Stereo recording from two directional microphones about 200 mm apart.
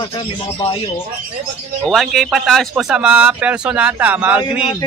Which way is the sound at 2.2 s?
Centre (ahead or behind).